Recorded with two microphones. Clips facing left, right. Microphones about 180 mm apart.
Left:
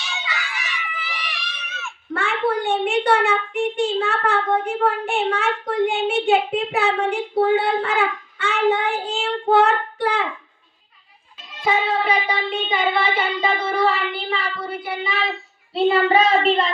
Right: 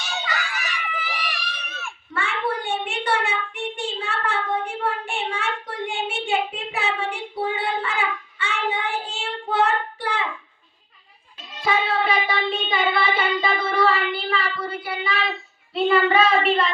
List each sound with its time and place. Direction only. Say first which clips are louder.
0.0 s screaming: right 2 dB; 45° right (ahead or behind)
2.1 s a sound: left 5 dB; 60° left (ahead or behind)
11.6 s child singing: left 2 dB; 20° left (ahead or behind)